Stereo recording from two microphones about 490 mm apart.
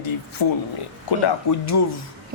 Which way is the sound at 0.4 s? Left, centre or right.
Left.